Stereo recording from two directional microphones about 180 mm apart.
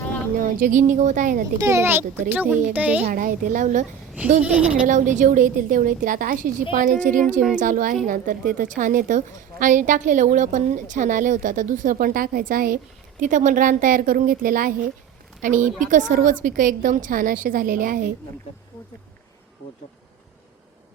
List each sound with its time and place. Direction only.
0.3 s a woman's voice: 50° right (ahead or behind)
1.5 s a child's voice: 15° right (ahead or behind)
3.0 s a woman's voice: 50° right (ahead or behind)
4.4 s a child's voice: 5° right (ahead or behind)
4.9 s a woman's voice: 45° right (ahead or behind)